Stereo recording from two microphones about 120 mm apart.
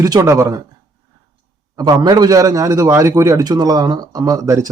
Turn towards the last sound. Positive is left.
turn(degrees=-25)  # may be behind; listen again after turning